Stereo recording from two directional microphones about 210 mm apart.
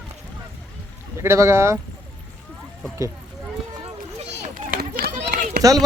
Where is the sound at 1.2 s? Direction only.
15° right (ahead or behind).